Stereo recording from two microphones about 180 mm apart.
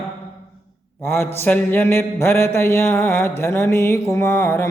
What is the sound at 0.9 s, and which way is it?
Speech, 15° left (ahead or behind).